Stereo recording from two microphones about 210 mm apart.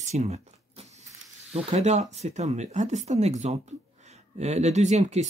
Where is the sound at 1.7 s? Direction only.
30° right (ahead or behind).